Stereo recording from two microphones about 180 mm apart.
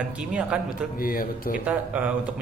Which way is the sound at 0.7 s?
55° left (ahead or behind).